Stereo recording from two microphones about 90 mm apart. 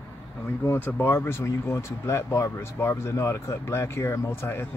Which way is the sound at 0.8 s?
20° left (ahead or behind).